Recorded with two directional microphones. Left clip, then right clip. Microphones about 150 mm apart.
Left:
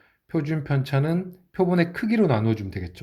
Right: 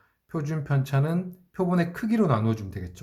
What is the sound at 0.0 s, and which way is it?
Speech, 20° left (ahead or behind).